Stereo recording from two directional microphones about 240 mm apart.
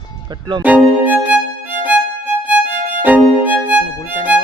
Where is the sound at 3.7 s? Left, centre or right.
Centre.